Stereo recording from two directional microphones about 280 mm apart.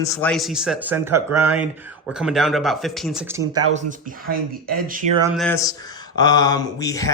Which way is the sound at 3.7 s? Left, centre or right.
Right.